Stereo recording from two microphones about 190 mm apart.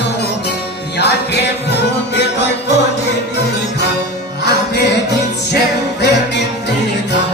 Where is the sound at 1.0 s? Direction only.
60° left (ahead or behind).